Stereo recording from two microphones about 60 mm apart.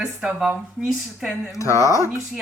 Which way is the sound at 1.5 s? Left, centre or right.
Left.